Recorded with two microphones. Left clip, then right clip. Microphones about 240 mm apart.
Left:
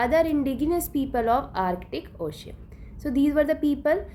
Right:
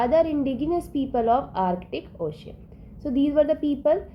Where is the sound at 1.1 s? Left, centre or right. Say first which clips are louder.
Right 2 dB; left.